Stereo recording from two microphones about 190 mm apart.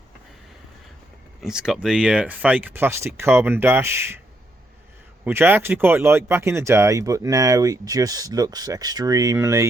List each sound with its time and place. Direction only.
1.4 s speech: 5° right (ahead or behind)
5.2 s speech: 10° right (ahead or behind)